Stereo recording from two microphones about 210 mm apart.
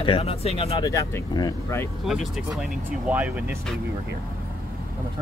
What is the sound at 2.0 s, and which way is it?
Speech, centre (ahead or behind).